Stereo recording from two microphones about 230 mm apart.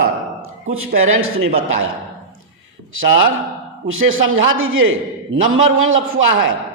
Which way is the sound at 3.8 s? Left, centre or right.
Right.